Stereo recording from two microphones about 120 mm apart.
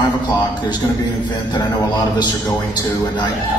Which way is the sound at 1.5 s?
35° left (ahead or behind).